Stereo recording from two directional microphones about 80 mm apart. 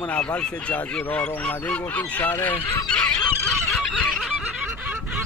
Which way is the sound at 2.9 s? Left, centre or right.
Centre.